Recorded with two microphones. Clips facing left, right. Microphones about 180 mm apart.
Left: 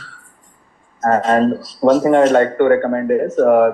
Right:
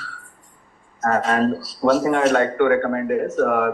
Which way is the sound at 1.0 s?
30° left (ahead or behind).